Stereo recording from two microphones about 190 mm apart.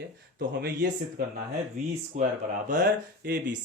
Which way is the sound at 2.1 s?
40° right (ahead or behind).